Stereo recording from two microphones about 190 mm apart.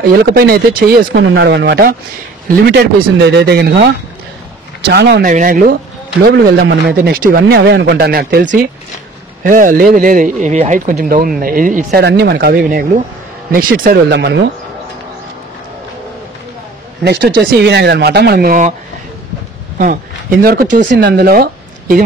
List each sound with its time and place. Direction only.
0.0 s speech: 55° right (ahead or behind)
5.2 s speech: 45° right (ahead or behind); by 14.4 s 65° right (ahead or behind)
17.0 s speech: 60° right (ahead or behind); by 18.8 s 45° right (ahead or behind)
19.8 s speech: 45° right (ahead or behind)